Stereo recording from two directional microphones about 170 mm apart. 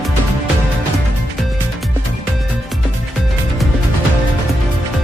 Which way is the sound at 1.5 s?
Centre (ahead or behind).